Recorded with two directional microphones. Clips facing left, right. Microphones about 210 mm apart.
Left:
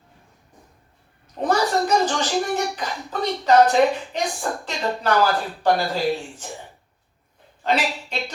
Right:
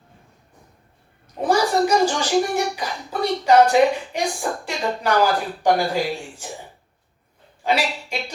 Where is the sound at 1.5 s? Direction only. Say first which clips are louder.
Right 2 dB; 10° right (ahead or behind).